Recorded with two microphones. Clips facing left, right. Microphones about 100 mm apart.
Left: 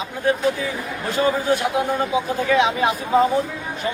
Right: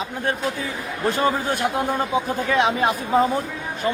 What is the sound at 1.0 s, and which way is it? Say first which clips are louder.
Speech: left 1 dB; 50° right (ahead or behind).